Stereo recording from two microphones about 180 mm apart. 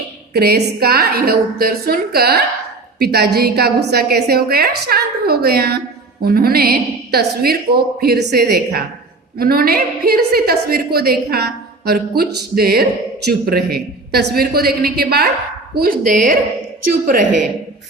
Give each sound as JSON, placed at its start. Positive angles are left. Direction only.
{"t": 0.3, "sound": "a woman's voice", "side_deg": -60}